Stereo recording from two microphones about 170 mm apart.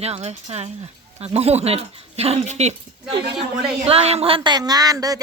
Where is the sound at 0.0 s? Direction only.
40° right (ahead or behind).